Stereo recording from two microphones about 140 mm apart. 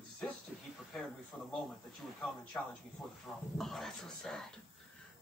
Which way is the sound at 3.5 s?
Centre (ahead or behind).